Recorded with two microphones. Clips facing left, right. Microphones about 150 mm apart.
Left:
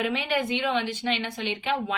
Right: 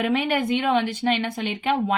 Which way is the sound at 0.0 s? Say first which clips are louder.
Right 4 dB; 50° right (ahead or behind).